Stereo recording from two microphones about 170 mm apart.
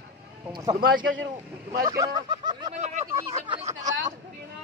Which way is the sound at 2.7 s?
40° right (ahead or behind).